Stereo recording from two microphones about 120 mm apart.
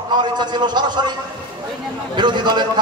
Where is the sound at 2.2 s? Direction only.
40° right (ahead or behind).